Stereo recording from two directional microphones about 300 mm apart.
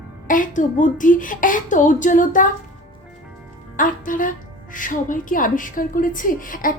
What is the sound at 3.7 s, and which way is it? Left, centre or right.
A woman's voice, left.